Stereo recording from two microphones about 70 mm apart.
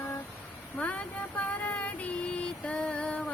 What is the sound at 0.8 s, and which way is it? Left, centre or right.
Speech, left.